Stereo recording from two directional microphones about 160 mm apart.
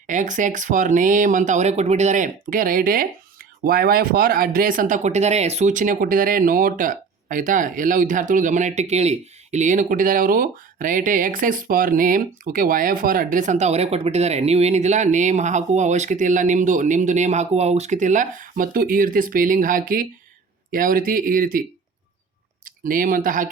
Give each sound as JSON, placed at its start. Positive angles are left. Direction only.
{"t": 0.1, "sound": "speech", "side_deg": -50}
{"t": 22.6, "sound": "speech", "side_deg": -60}